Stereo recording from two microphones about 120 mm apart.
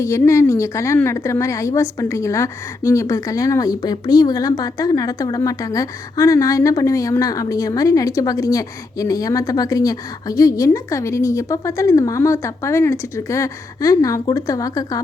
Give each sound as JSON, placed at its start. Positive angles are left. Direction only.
{"t": 0.0, "sound": "a woman's voice", "side_deg": 25}